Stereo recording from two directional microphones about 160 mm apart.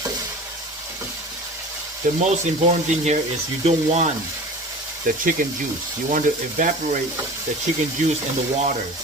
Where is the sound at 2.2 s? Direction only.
45° right (ahead or behind).